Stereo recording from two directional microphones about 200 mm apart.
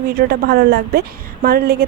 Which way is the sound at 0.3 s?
50° right (ahead or behind).